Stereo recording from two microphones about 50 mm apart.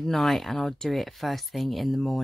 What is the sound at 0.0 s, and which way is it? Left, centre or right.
Speech, centre.